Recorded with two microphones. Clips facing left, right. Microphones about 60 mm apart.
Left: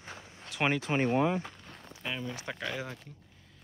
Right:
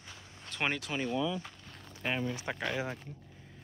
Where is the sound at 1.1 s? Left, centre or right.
Left.